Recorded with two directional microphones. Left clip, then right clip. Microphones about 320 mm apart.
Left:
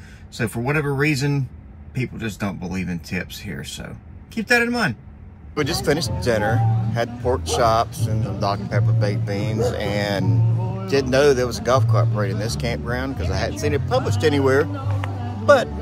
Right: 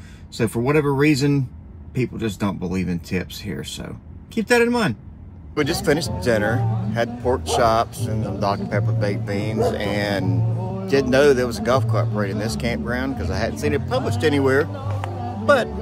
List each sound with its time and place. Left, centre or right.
0.4 s speech: centre
10.3 s music: right
10.9 s speech: centre